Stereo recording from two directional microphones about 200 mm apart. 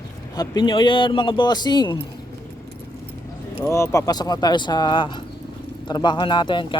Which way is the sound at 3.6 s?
15° left (ahead or behind).